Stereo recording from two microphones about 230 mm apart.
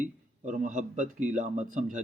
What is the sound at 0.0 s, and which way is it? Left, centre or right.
Speech, right.